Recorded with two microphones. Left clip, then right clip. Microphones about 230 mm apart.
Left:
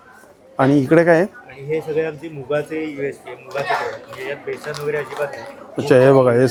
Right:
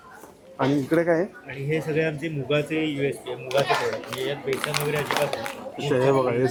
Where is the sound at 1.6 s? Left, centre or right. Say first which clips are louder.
Left 4 dB; right.